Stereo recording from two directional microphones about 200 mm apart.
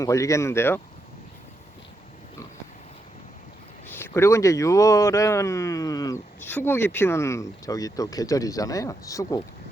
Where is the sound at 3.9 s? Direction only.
10° left (ahead or behind).